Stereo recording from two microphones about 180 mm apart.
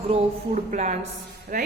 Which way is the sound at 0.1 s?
45° right (ahead or behind).